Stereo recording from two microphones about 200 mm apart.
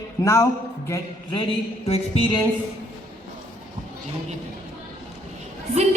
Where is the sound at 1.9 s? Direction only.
30° left (ahead or behind).